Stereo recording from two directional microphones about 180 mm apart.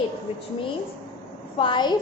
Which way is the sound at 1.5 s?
25° left (ahead or behind).